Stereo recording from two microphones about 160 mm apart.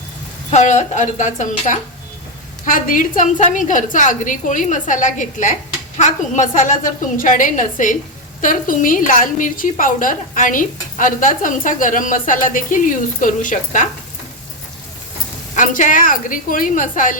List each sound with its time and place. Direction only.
0.5 s a woman's voice: 50° left (ahead or behind)
15.5 s a woman's voice: 55° left (ahead or behind)